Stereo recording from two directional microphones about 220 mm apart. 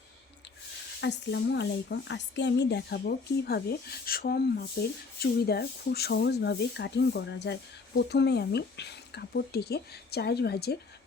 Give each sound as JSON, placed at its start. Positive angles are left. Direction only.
{"t": 1.0, "sound": "speech", "side_deg": 50}